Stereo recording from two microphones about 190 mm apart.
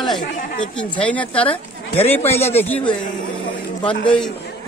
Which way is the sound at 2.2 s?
35° left (ahead or behind).